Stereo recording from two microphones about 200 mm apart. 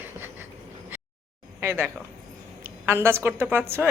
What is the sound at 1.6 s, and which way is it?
A woman's voice, 10° right (ahead or behind).